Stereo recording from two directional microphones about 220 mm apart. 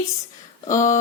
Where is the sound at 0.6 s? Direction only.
35° left (ahead or behind).